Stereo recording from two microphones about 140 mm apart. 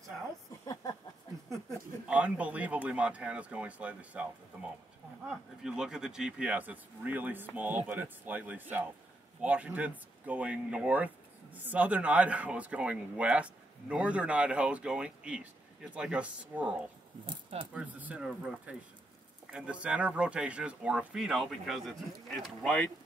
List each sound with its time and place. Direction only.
2.0 s a man's voice: 10° right (ahead or behind)
5.6 s a man's voice: 5° right (ahead or behind)
17.3 s speech: 35° right (ahead or behind)
17.7 s a man's voice: 10° right (ahead or behind)